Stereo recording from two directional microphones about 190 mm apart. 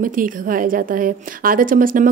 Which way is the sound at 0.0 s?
45° right (ahead or behind).